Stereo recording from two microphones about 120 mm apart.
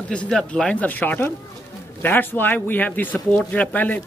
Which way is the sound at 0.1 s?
10° left (ahead or behind).